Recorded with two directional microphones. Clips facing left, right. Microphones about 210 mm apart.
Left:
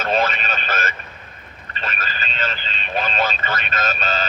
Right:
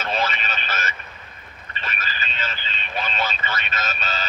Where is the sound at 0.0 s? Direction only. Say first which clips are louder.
Left 5 dB; 50° left (ahead or behind).